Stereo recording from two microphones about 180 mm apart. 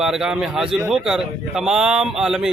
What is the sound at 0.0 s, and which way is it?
A man's voice, centre (ahead or behind).